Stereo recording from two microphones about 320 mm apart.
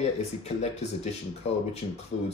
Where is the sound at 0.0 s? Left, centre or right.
Centre.